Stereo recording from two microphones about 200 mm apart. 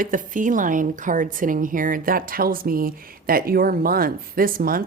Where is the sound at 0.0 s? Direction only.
40° right (ahead or behind).